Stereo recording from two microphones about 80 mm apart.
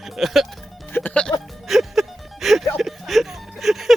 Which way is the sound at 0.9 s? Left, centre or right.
Centre.